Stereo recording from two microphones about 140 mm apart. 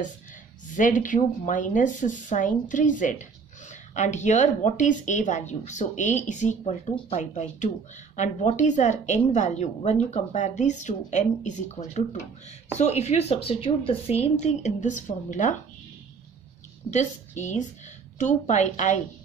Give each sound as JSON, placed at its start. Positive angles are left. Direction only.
{"t": 0.7, "sound": "speech", "side_deg": 65}
{"t": 16.9, "sound": "speech", "side_deg": 60}